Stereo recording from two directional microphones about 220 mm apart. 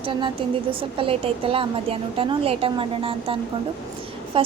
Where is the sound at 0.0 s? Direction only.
25° right (ahead or behind).